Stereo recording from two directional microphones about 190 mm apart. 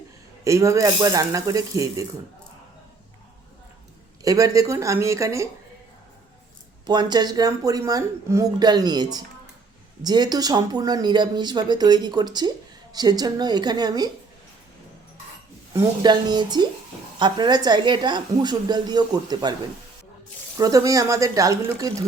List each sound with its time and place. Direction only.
0.4 s speech: 15° right (ahead or behind)
4.2 s speech: 20° right (ahead or behind)
6.8 s speech: 20° right (ahead or behind)
15.7 s speech: 20° right (ahead or behind)
20.6 s speech: 20° right (ahead or behind)